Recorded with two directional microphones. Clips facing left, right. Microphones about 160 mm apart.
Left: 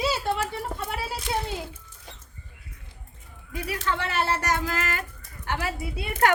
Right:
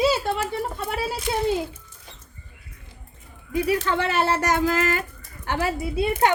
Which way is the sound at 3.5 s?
20° right (ahead or behind).